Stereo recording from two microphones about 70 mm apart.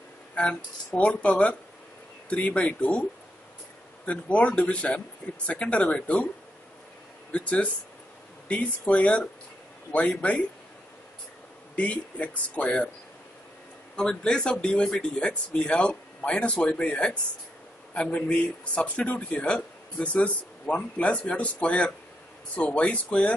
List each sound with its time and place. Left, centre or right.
0.3 s a man's voice: centre
7.3 s speech: centre
11.7 s speech: left
13.9 s a man's voice: centre